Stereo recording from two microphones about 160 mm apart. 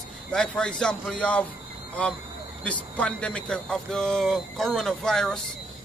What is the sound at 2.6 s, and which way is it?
Speech, 10° left (ahead or behind).